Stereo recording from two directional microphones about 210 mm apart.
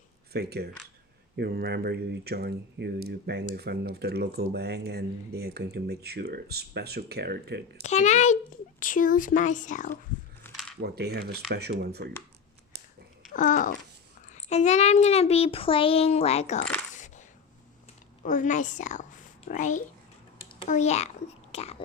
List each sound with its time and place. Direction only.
0.3 s speech: 50° right (ahead or behind)
7.8 s speech: 35° left (ahead or behind)
10.5 s a sound: centre (ahead or behind)
10.8 s speech: 50° right (ahead or behind)
12.7 s a sound: 50° right (ahead or behind)
13.3 s a child's voice: 40° left (ahead or behind)
16.9 s coin: 35° left (ahead or behind)
18.3 s a woman's voice: 35° left (ahead or behind)
20.4 s a sound: 25° left (ahead or behind)
20.7 s speech: 35° left (ahead or behind)
21.5 s whispering: 30° left (ahead or behind)